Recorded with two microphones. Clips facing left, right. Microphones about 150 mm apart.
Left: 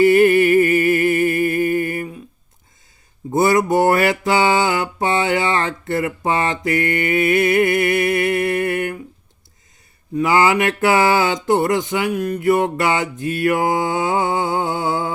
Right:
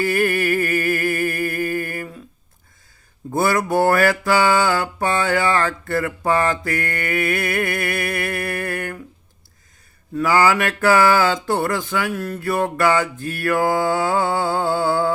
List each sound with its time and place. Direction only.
0.0 s a sound: 20° left (ahead or behind)
3.3 s mantra: 20° left (ahead or behind)
10.2 s mantra: 20° left (ahead or behind)